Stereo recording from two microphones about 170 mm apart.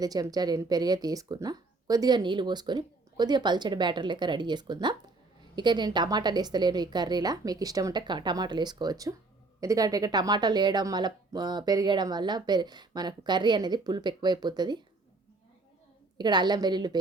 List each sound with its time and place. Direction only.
0.0 s speech: 20° right (ahead or behind)
16.1 s speech: 25° right (ahead or behind)